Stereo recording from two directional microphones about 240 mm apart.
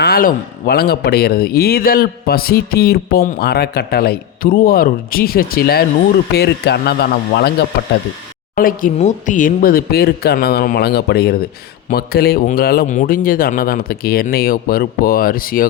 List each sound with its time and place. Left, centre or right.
0.0 s speech: left
8.5 s speech: left